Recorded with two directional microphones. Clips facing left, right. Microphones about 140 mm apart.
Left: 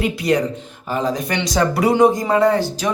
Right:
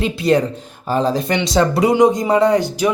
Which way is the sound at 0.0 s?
30° right (ahead or behind).